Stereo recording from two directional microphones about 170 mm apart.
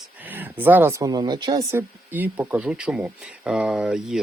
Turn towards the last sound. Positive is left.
turn(degrees=-5)  # may be behind; listen again after turning